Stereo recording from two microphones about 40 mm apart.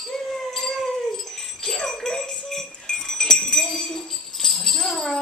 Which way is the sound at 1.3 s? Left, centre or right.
Centre.